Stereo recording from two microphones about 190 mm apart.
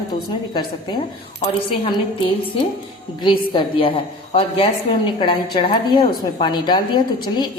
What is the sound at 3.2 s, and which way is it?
A woman's voice, 25° left (ahead or behind).